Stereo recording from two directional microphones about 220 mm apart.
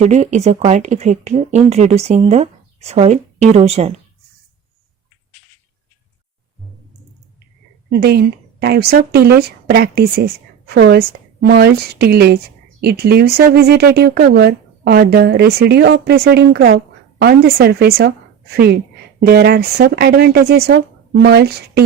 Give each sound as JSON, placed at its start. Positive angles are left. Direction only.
{"t": 0.0, "sound": "speech", "side_deg": -30}
{"t": 7.9, "sound": "speech", "side_deg": -45}